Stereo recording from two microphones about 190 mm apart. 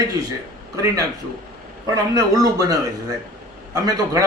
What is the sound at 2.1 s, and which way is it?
Speech, 20° right (ahead or behind).